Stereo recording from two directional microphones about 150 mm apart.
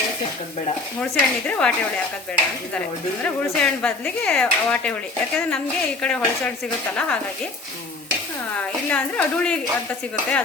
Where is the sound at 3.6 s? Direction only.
5° left (ahead or behind).